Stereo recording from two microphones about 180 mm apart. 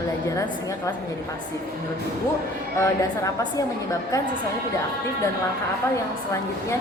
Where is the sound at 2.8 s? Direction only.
15° left (ahead or behind).